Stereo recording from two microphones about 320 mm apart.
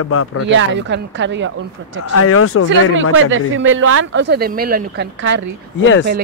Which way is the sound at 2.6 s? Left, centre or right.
Right.